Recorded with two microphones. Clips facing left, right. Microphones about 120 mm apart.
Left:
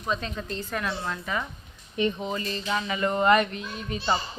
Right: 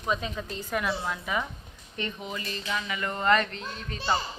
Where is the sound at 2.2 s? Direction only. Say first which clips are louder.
Left 5 dB; 35° left (ahead or behind).